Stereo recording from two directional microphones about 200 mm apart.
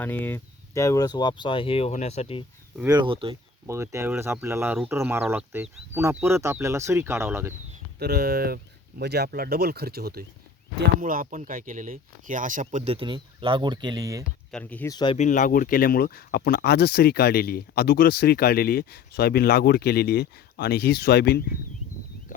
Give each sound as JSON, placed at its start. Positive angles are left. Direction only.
{"t": 0.0, "sound": "speech", "side_deg": 10}
{"t": 2.8, "sound": "speech", "side_deg": -20}
{"t": 3.7, "sound": "speech", "side_deg": -15}
{"t": 7.9, "sound": "speech", "side_deg": -50}
{"t": 14.5, "sound": "speech", "side_deg": 10}
{"t": 14.9, "sound": "speech", "side_deg": 25}
{"t": 15.2, "sound": "speech", "side_deg": 40}